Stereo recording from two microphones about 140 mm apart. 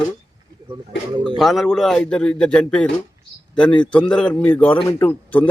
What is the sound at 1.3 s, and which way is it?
Speech, centre (ahead or behind).